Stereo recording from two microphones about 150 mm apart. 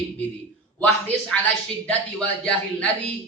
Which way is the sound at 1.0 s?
10° left (ahead or behind).